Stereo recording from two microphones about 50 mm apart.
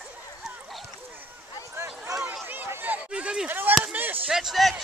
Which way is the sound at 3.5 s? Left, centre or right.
Right.